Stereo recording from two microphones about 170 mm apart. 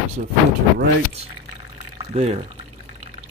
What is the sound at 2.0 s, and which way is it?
Speech, 40° right (ahead or behind).